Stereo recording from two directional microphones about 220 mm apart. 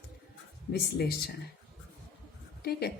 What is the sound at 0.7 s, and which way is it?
Speech, 45° left (ahead or behind).